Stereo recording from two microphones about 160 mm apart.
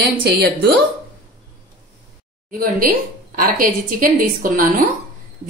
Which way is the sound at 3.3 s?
60° right (ahead or behind).